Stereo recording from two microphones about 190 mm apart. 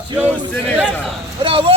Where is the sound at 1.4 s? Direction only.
25° right (ahead or behind).